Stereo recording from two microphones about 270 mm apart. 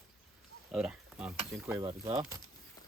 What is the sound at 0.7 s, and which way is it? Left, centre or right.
Speech, centre.